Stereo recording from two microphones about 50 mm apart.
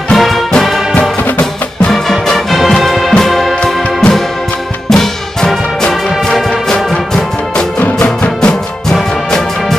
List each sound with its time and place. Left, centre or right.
0.1 s music: centre
3.6 s music: centre
7.8 s music: left
8.4 s music: centre